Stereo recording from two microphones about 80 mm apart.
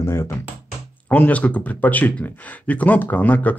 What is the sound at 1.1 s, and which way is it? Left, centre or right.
Speech, centre.